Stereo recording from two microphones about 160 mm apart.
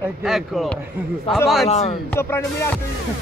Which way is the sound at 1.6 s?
40° left (ahead or behind).